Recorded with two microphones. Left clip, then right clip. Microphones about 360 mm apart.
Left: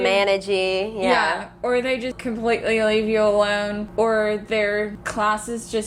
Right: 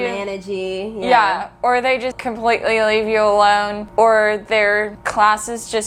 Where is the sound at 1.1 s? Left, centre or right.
Right.